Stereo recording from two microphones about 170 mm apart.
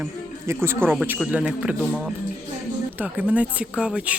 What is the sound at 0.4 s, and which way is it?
Speech, 15° right (ahead or behind).